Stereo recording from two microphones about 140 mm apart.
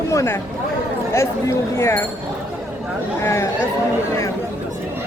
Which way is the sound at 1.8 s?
15° left (ahead or behind).